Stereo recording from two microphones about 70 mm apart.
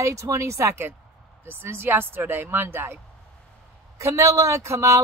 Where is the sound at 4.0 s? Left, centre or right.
Right.